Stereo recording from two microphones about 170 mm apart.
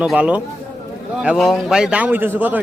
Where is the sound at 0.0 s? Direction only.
5° right (ahead or behind).